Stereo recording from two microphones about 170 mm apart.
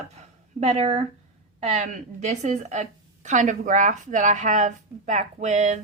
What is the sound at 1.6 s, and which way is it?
A woman's voice, 45° right (ahead or behind).